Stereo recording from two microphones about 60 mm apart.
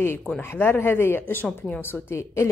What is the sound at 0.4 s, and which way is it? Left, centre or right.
A woman's voice, left.